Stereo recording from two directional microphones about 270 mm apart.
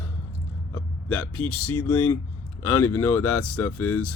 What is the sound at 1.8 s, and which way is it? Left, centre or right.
Speech, centre.